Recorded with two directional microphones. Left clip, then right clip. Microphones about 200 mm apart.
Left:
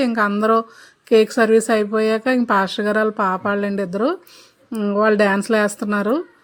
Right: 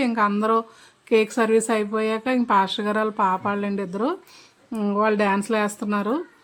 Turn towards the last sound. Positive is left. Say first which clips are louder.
# left 5 dB
turn(degrees=20)  # may be behind; listen again after turning